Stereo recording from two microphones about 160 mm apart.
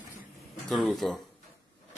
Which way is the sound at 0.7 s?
Centre (ahead or behind).